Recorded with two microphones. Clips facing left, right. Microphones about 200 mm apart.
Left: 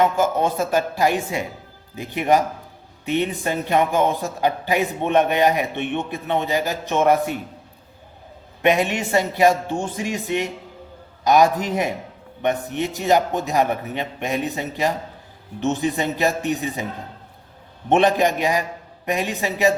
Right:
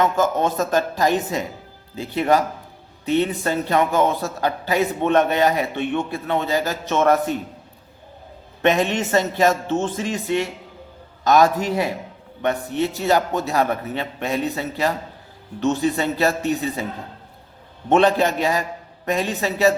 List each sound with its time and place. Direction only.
0.0 s a man's voice: 10° left (ahead or behind)
8.6 s a man's voice: 10° left (ahead or behind)
17.8 s a man's voice: 15° left (ahead or behind)